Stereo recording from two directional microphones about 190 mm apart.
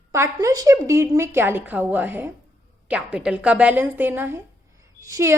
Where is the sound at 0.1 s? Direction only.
15° right (ahead or behind).